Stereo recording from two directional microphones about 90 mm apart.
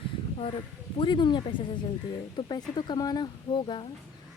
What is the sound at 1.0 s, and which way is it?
Speech, 60° left (ahead or behind).